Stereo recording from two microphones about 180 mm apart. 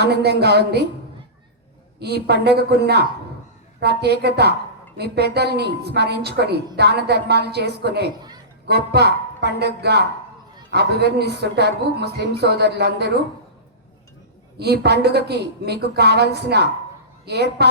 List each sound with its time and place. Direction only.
0.0 s a woman's voice: 65° right (ahead or behind)
2.2 s a woman's voice: 65° right (ahead or behind)
14.6 s a woman's voice: 65° right (ahead or behind)